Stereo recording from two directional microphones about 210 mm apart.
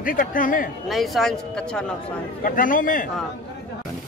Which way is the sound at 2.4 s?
40° left (ahead or behind).